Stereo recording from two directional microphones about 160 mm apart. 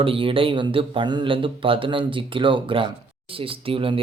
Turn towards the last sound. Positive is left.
turn(degrees=-35)  # may be behind; listen again after turning